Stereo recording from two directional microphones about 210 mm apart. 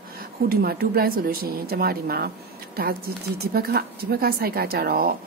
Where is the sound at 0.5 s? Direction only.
45° right (ahead or behind).